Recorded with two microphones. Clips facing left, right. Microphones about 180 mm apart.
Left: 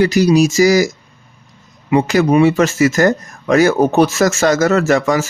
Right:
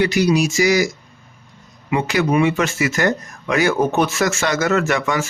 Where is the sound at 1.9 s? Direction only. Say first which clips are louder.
Left 6 dB; 40° left (ahead or behind).